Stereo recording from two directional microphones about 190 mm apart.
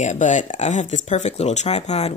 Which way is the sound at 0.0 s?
40° left (ahead or behind).